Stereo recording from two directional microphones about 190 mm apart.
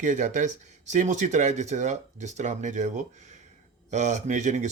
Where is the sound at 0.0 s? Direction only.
40° right (ahead or behind).